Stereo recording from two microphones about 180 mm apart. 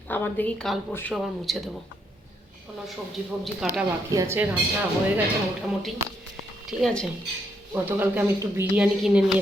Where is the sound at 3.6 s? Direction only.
Centre (ahead or behind).